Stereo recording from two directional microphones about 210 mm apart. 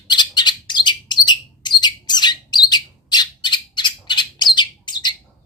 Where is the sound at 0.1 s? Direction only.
20° left (ahead or behind).